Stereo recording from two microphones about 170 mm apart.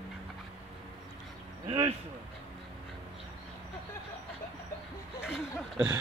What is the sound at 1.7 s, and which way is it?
Speech, 25° right (ahead or behind).